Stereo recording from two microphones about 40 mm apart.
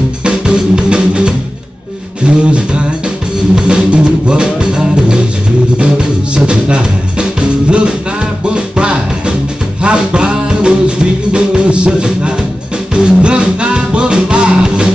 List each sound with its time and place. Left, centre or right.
0.2 s music: right